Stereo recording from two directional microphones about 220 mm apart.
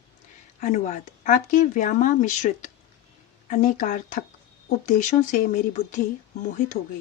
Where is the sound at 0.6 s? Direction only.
35° left (ahead or behind).